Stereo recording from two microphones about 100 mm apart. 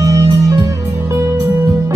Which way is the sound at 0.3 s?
45° right (ahead or behind).